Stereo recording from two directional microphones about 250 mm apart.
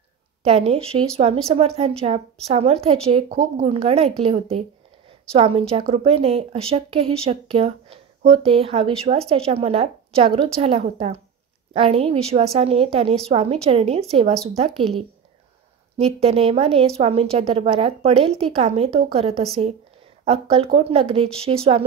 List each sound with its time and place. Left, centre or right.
0.4 s a woman's voice: right
16.0 s a woman's voice: right